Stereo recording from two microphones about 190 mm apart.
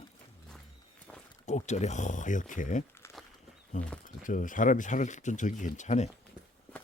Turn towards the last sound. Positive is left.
turn(degrees=40)  # may be behind; listen again after turning